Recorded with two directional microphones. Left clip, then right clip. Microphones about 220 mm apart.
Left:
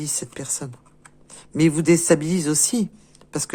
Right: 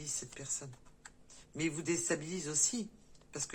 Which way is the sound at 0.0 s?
50° left (ahead or behind).